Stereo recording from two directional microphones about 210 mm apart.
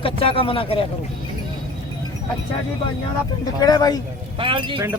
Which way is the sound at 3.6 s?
20° left (ahead or behind).